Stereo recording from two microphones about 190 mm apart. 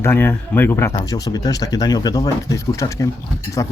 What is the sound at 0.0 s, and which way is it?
Speech, 10° left (ahead or behind).